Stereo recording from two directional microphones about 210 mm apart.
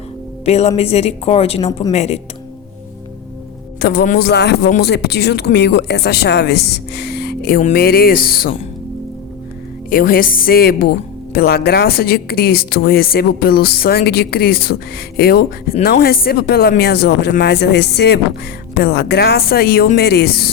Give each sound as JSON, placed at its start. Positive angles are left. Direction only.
{"t": 0.4, "sound": "a woman's voice", "side_deg": 30}
{"t": 3.8, "sound": "speech", "side_deg": 45}
{"t": 9.9, "sound": "speech", "side_deg": 45}